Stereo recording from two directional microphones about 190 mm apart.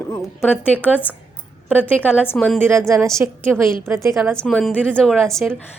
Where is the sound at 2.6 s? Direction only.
15° right (ahead or behind).